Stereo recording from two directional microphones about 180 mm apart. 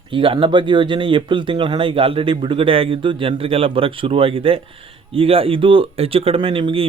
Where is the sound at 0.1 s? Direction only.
30° right (ahead or behind).